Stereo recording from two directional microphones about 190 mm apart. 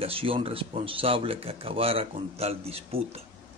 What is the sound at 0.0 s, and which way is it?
A man's voice, 30° right (ahead or behind).